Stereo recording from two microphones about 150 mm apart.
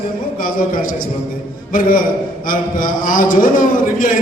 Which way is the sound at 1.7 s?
65° left (ahead or behind).